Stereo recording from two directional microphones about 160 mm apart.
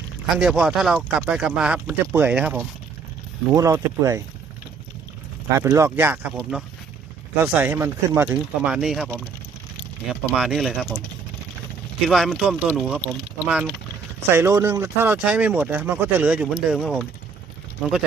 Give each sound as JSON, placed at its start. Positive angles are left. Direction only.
{"t": 0.3, "sound": "speech", "side_deg": -5}
{"t": 3.5, "sound": "speech", "side_deg": -20}
{"t": 5.5, "sound": "speech", "side_deg": -20}
{"t": 10.1, "sound": "speech", "side_deg": -5}
{"t": 12.0, "sound": "speech", "side_deg": 0}